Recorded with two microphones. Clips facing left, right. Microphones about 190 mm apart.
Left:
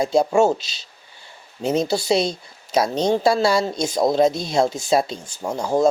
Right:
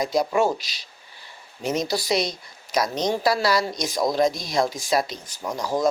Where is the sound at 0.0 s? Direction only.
25° left (ahead or behind).